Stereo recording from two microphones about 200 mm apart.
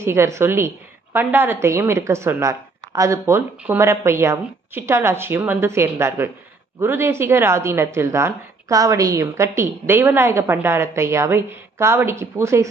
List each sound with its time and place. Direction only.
0.0 s a woman's voice: 15° right (ahead or behind)